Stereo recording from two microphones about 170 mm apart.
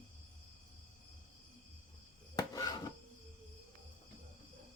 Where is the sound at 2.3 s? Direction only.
20° left (ahead or behind).